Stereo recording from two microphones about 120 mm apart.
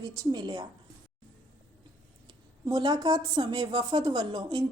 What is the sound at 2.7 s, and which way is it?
Speech, 40° right (ahead or behind).